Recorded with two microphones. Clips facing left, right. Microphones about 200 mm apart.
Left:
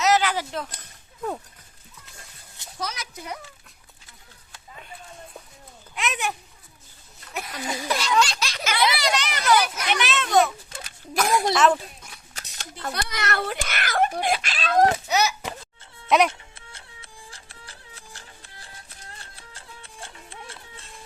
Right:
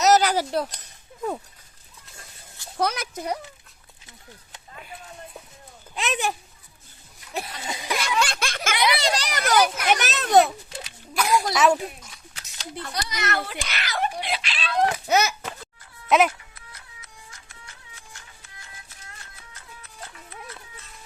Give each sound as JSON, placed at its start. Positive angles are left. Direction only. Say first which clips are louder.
{"t": 0.0, "sound": "a sound", "louder": "right 3 dB", "side_deg": -40}
{"t": 2.7, "sound": "speech", "louder": "right 8 dB", "side_deg": -60}
{"t": 5.9, "sound": "speech", "louder": "right 2 dB", "side_deg": -30}
{"t": 7.3, "sound": "speech", "louder": "right 1 dB", "side_deg": -30}
{"t": 8.0, "sound": "a sound", "louder": "left 3 dB", "side_deg": -55}
{"t": 8.7, "sound": "a child's voice", "louder": "even", "side_deg": -20}
{"t": 9.4, "sound": "speech", "louder": "right 1 dB", "side_deg": -50}
{"t": 10.8, "sound": "a sound", "louder": "left 1 dB", "side_deg": 45}
{"t": 11.5, "sound": "speech", "louder": "even", "side_deg": -10}
{"t": 12.3, "sound": "a sound", "louder": "left 3 dB", "side_deg": 40}
{"t": 12.8, "sound": "a child's voice", "louder": "left 1 dB", "side_deg": 55}
{"t": 15.0, "sound": "speech", "louder": "right 2 dB", "side_deg": -50}
{"t": 16.0, "sound": "speech", "louder": "even", "side_deg": 0}
{"t": 16.3, "sound": "music", "louder": "left 1 dB", "side_deg": 25}